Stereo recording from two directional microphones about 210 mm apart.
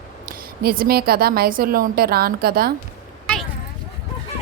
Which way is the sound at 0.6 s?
45° right (ahead or behind).